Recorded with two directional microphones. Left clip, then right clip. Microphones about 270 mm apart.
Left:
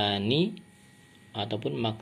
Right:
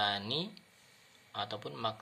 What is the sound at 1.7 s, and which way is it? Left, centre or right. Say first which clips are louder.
Speech: left 5 dB; right.